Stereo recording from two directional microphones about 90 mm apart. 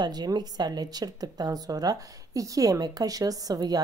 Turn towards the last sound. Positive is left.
turn(degrees=-45)  # may be behind; listen again after turning